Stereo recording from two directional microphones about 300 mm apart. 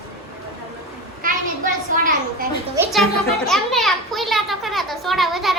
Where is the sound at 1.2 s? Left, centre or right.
Right.